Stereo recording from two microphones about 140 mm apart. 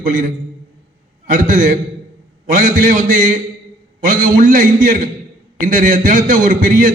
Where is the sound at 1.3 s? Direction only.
70° right (ahead or behind).